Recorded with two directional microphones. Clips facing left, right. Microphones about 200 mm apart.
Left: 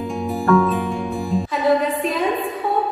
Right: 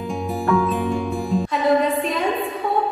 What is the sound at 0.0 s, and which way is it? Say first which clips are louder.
Music: left 2 dB; centre (ahead or behind).